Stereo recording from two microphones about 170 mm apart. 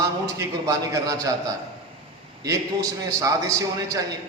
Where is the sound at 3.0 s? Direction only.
20° right (ahead or behind).